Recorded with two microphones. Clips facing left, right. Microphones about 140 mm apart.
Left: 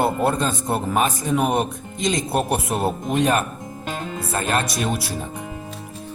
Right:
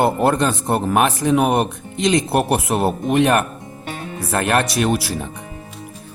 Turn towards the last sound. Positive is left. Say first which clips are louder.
# right 5 dB
turn(degrees=-75)  # may be behind; listen again after turning